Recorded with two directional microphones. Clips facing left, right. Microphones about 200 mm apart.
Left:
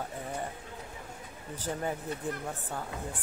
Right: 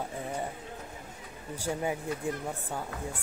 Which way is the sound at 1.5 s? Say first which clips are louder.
Right 2 dB; 10° right (ahead or behind).